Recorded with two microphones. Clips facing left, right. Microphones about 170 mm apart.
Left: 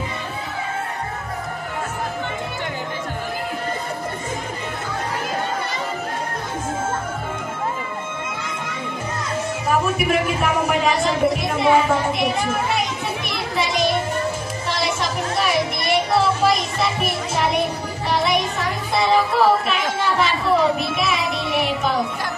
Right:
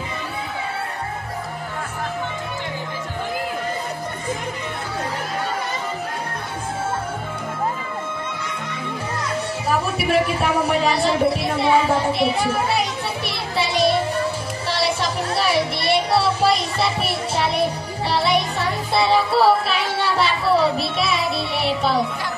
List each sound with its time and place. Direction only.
9.7 s speech: 35° right (ahead or behind)
13.3 s children playing: 35° right (ahead or behind)
14.7 s music: 35° right (ahead or behind)